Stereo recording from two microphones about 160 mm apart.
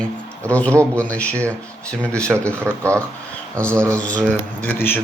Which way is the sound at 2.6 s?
15° right (ahead or behind).